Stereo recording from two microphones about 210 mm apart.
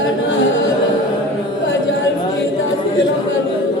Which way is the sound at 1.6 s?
65° left (ahead or behind).